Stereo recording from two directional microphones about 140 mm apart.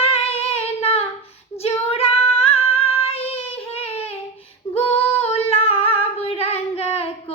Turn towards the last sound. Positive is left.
turn(degrees=45)  # may be behind; listen again after turning